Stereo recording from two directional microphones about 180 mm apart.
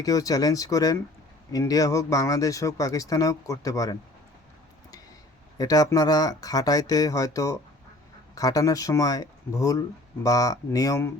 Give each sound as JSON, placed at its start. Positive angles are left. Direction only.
{"t": 0.0, "sound": "speech", "side_deg": 20}
{"t": 5.5, "sound": "speech", "side_deg": 20}